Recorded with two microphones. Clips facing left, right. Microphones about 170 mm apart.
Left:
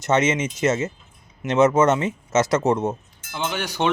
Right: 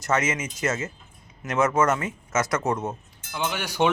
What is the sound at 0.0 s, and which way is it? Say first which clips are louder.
Speech: left 5 dB; 20° left (ahead or behind).